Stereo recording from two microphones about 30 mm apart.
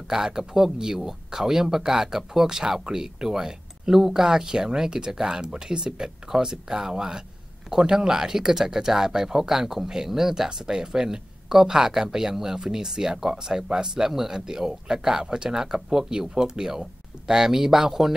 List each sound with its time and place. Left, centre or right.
0.1 s speech: centre